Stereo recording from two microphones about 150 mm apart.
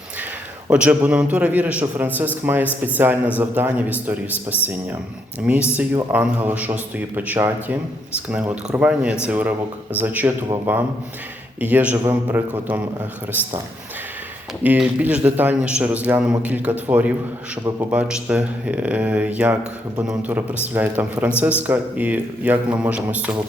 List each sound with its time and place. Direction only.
0.7 s speech: 10° right (ahead or behind)
5.7 s speech: 10° right (ahead or behind)
14.6 s speech: 10° right (ahead or behind)